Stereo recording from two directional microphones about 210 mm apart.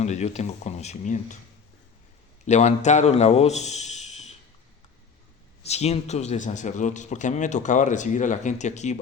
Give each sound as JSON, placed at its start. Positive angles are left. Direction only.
{"t": 0.0, "sound": "a man's voice", "side_deg": 35}
{"t": 2.5, "sound": "a man's voice", "side_deg": 30}
{"t": 5.6, "sound": "a man's voice", "side_deg": 30}